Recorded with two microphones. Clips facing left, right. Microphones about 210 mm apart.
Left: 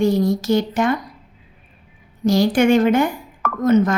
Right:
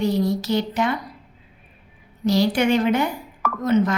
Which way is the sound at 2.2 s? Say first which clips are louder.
Left 4 dB; 50° left (ahead or behind).